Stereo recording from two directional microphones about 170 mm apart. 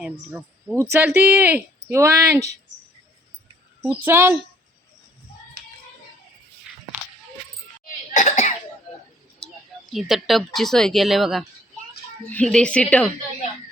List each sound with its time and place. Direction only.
0.0 s speech: 5° right (ahead or behind)
3.8 s speech: 15° right (ahead or behind)
6.7 s a sound: 5° right (ahead or behind)
8.1 s cough: 45° left (ahead or behind)
9.9 s a woman's voice: centre (ahead or behind)